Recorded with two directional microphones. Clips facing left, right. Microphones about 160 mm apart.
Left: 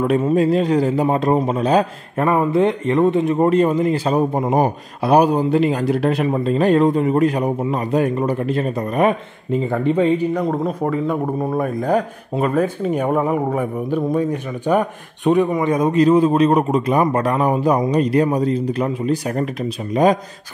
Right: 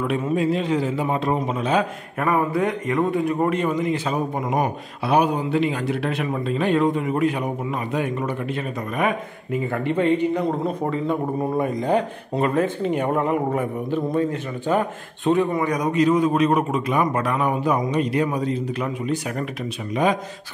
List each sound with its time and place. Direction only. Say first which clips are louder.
0.0 s a man's voice: left 6 dB; 35° left (ahead or behind)
2.2 s a man's voice: left 5 dB; 25° left (ahead or behind)
3.5 s a man's voice: left 6 dB; 35° left (ahead or behind)
9.7 s speech: left 3 dB; 10° left (ahead or behind)
15.7 s a man's voice: left 6 dB; 30° left (ahead or behind)